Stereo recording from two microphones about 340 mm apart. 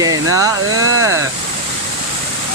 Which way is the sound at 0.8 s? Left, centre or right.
Right.